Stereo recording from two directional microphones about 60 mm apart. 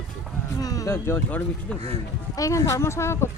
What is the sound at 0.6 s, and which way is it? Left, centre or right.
Speech, left.